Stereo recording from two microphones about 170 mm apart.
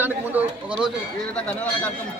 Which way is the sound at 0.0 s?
10° right (ahead or behind).